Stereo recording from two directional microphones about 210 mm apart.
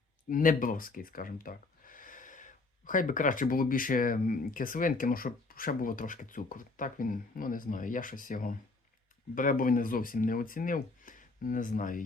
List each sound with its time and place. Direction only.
0.3 s speech: 40° left (ahead or behind)